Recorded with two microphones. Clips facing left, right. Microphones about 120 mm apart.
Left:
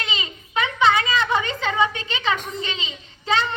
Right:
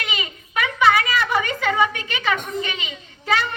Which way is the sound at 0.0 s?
25° left (ahead or behind).